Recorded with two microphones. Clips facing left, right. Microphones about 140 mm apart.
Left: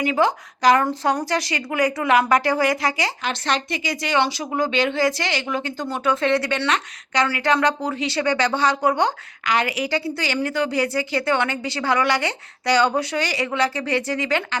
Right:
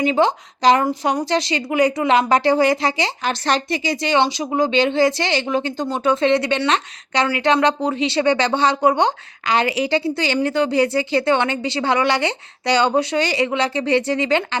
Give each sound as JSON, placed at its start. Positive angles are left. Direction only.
{"t": 0.0, "sound": "speech", "side_deg": -25}
{"t": 0.9, "sound": "a woman's voice", "side_deg": -15}
{"t": 1.2, "sound": "speech", "side_deg": -25}
{"t": 3.2, "sound": "speech", "side_deg": -35}